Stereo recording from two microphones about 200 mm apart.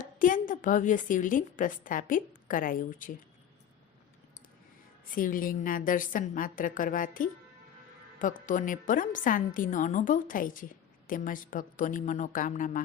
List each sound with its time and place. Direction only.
0.0 s a woman's voice: 40° left (ahead or behind)
5.1 s a woman's voice: 45° left (ahead or behind)